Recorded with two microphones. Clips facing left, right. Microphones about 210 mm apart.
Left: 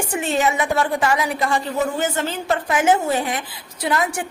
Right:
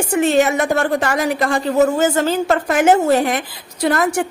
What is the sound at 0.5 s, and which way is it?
Speech, 45° right (ahead or behind).